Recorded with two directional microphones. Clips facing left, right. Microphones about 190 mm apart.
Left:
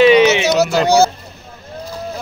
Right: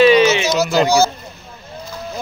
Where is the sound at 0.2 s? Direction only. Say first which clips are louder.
Left 2 dB; 65° left (ahead or behind).